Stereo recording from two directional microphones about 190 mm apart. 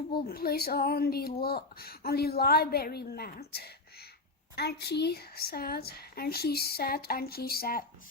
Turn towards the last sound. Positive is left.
turn(degrees=50)  # may be behind; listen again after turning